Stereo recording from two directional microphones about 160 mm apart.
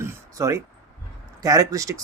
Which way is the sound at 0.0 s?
15° right (ahead or behind).